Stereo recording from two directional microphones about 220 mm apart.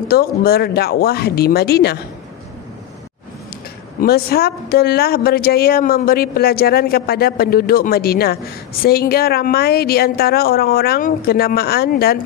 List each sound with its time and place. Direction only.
0.1 s speech: 45° left (ahead or behind)
4.0 s speech: 45° left (ahead or behind)